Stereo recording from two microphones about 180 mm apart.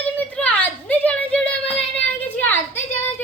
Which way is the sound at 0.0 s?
10° left (ahead or behind).